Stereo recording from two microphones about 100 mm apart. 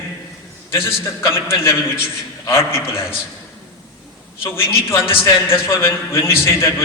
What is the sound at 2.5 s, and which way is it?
Speech, 25° left (ahead or behind).